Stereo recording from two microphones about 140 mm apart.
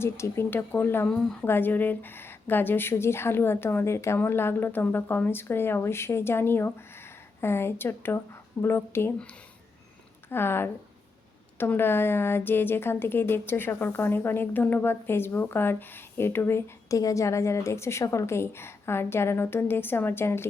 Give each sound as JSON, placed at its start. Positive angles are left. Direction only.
{"t": 0.0, "sound": "speech", "side_deg": 20}
{"t": 10.2, "sound": "speech", "side_deg": 15}